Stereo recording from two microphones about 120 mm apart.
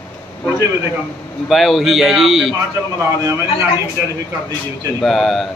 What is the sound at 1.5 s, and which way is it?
Speech, centre (ahead or behind).